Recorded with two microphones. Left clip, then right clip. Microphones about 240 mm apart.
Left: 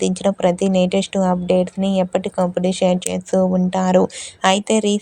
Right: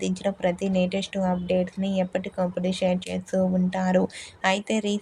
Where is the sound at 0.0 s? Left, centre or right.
Left.